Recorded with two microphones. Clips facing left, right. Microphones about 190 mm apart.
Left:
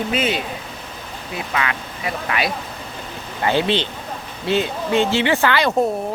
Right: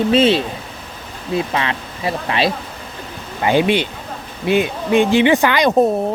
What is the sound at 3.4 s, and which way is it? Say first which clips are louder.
Speech: right 4 dB; 15° right (ahead or behind).